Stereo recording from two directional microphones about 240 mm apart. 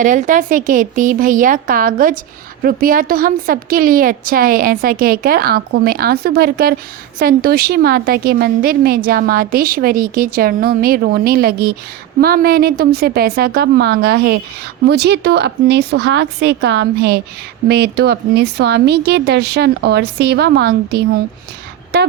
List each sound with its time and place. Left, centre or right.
0.0 s a woman's voice: right